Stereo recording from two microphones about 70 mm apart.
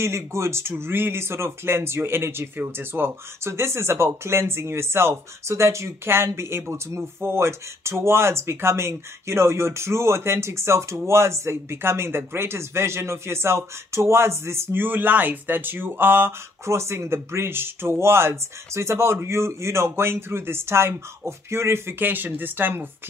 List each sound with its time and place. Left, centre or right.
0.0 s speech: right